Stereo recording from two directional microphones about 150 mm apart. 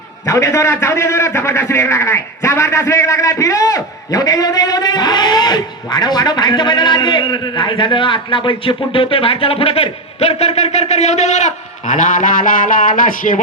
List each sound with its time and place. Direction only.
0.3 s a man's voice: 20° left (ahead or behind); by 13.4 s 65° left (ahead or behind)